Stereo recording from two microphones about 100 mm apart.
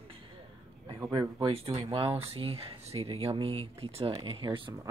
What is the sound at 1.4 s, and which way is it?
Speech, 75° right (ahead or behind).